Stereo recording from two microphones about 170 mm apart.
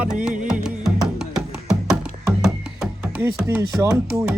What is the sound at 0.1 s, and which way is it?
Music, 5° right (ahead or behind).